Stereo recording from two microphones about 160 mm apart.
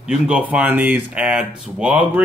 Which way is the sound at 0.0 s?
5° right (ahead or behind).